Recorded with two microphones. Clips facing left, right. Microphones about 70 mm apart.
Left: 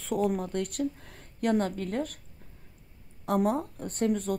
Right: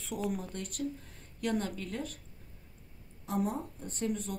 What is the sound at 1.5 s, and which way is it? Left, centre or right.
Speech, left.